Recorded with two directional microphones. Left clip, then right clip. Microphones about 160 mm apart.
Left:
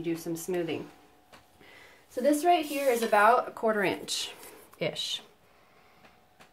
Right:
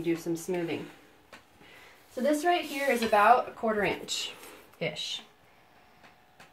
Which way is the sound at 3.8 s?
50° left (ahead or behind).